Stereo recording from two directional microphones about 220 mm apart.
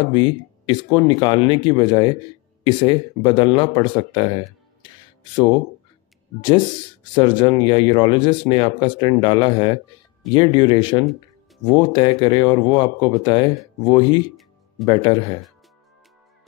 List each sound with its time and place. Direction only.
0.1 s speech: 20° left (ahead or behind)
7.2 s speech: 20° left (ahead or behind)